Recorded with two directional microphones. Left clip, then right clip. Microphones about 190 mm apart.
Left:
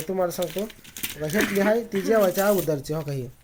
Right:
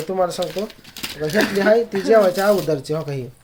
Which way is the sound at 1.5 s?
35° left (ahead or behind).